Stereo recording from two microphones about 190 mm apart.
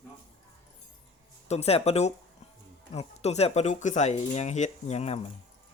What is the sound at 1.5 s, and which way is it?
Speech, 35° left (ahead or behind).